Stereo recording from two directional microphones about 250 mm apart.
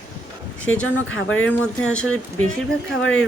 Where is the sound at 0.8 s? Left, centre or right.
Left.